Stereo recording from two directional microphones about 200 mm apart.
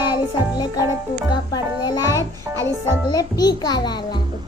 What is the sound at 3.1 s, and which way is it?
A child's voice, 20° left (ahead or behind).